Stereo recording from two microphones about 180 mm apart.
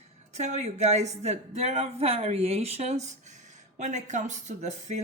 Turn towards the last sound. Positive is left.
turn(degrees=-40)  # may be behind; listen again after turning